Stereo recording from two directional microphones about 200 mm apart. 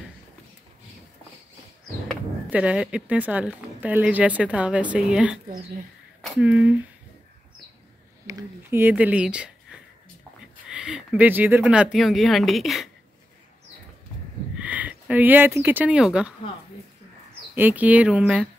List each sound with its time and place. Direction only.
2.5 s speech: 5° right (ahead or behind)
8.3 s speech: 15° right (ahead or behind)
14.6 s speech: 5° right (ahead or behind)
17.6 s speech: 10° right (ahead or behind)